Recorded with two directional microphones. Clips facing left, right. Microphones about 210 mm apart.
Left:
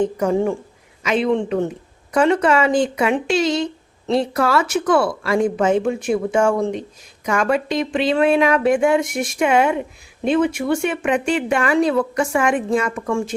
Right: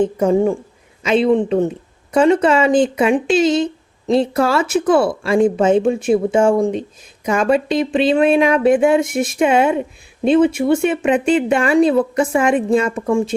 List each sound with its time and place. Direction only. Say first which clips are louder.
0.2 s speech: right 4 dB; 25° right (ahead or behind)